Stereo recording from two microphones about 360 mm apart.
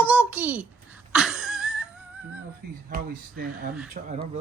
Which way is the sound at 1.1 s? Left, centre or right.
Centre.